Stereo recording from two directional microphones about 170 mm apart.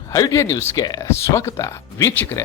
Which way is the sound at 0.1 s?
20° left (ahead or behind).